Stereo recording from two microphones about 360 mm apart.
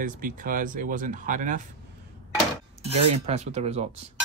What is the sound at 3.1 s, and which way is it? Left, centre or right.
Speech, centre.